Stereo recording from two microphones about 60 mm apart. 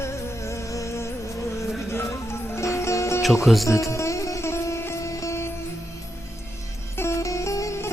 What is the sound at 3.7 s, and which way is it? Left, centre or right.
Music, left.